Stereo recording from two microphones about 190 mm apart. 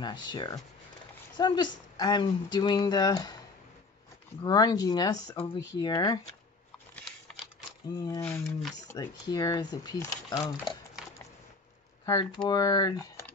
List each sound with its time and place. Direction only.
0.0 s speech: 25° left (ahead or behind)
7.9 s speech: 20° left (ahead or behind)
8.2 s speech: 10° left (ahead or behind)
12.1 s speech: 20° left (ahead or behind)